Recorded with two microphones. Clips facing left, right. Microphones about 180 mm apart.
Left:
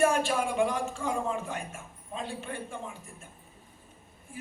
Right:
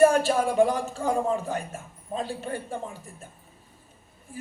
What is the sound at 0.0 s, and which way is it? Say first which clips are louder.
A man's voice: right 6 dB; 40° right (ahead or behind).